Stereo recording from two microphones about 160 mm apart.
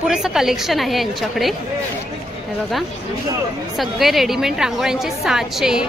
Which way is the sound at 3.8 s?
Centre (ahead or behind).